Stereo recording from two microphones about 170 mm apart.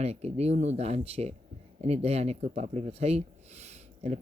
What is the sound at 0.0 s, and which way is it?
Speech, 40° right (ahead or behind).